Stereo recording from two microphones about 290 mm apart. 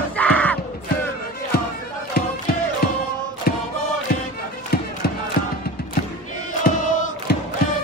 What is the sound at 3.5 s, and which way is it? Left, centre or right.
Music, left.